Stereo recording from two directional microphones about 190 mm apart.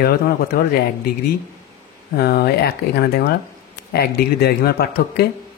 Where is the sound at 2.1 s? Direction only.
55° left (ahead or behind).